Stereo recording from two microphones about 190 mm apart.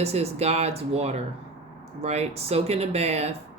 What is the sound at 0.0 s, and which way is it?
Speech, 35° right (ahead or behind).